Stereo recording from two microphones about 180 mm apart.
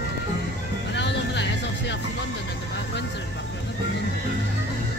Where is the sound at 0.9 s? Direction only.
75° left (ahead or behind).